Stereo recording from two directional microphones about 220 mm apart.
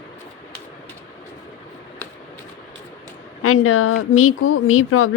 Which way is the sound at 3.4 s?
75° left (ahead or behind).